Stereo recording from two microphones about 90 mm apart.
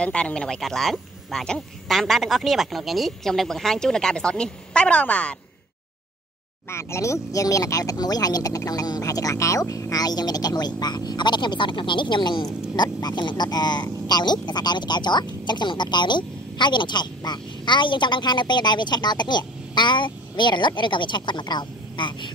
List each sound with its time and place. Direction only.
0.0 s a woman's voice: 15° left (ahead or behind)
6.7 s speech: 30° left (ahead or behind); by 22.3 s 60° left (ahead or behind)